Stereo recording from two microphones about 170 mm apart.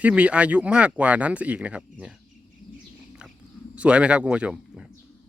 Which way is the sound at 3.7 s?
5° right (ahead or behind).